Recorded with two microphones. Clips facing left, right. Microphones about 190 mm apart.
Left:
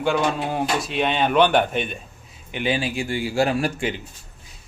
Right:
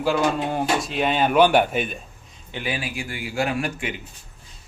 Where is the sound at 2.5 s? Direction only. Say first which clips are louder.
Left 5 dB; 20° left (ahead or behind).